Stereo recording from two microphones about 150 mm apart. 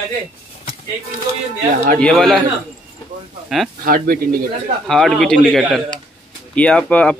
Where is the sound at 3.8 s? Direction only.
70° right (ahead or behind).